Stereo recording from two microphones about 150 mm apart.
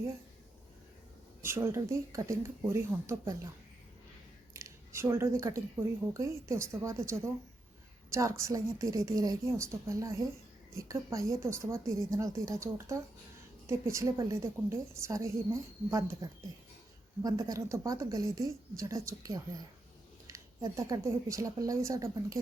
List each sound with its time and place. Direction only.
1.4 s a woman's voice: 15° right (ahead or behind)
4.5 s scissors: 20° right (ahead or behind)
6.1 s a woman's voice: 20° right (ahead or behind)